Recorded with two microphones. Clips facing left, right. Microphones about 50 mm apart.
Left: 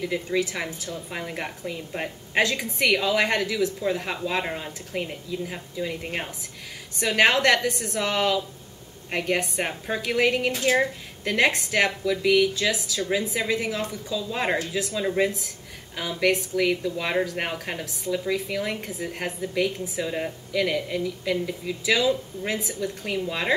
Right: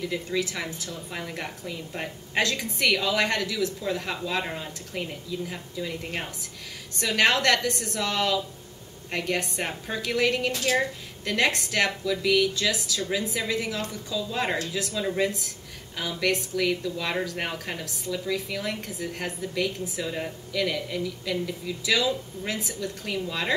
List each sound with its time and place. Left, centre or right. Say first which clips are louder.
0.0 s a woman's voice: left 3 dB; centre